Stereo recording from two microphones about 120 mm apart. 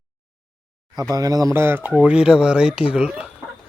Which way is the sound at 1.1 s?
30° right (ahead or behind).